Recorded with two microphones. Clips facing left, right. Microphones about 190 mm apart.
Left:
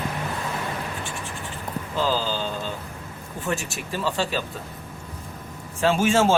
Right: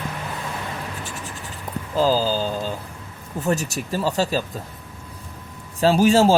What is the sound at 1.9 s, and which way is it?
Speech, 40° right (ahead or behind).